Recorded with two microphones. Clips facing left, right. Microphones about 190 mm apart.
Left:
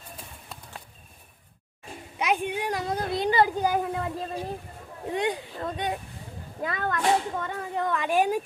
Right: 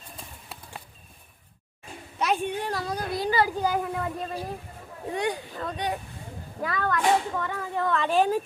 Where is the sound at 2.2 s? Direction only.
15° left (ahead or behind).